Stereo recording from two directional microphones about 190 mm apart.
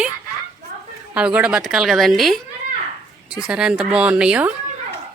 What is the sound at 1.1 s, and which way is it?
Speech, 5° right (ahead or behind).